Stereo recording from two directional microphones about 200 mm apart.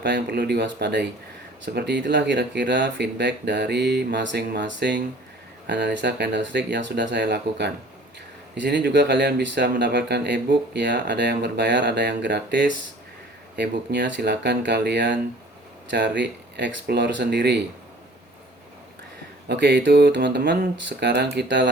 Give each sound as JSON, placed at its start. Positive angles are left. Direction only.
{"t": 0.0, "sound": "speech", "side_deg": -55}
{"t": 19.5, "sound": "speech", "side_deg": -55}